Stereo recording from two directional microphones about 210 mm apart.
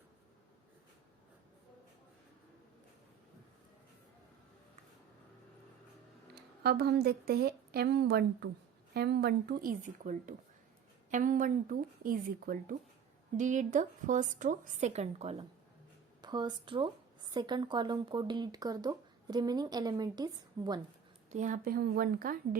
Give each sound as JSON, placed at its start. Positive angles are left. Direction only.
{"t": 6.3, "sound": "speech", "side_deg": -50}
{"t": 16.2, "sound": "speech", "side_deg": -20}
{"t": 21.2, "sound": "speech", "side_deg": -35}